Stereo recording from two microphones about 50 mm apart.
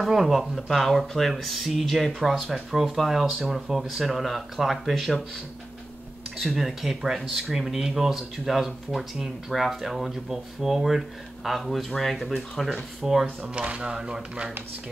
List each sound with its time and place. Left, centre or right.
0.1 s speech: centre
6.4 s speech: centre
13.6 s speech: right